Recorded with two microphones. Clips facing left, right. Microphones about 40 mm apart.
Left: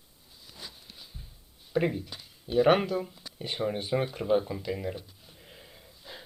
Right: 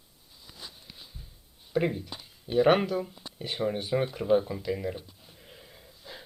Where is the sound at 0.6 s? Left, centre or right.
Centre.